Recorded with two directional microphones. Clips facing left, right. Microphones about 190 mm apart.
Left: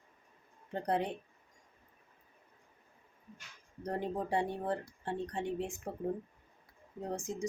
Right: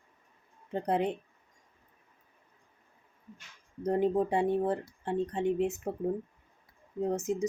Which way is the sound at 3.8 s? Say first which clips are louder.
Right 9 dB; 20° right (ahead or behind).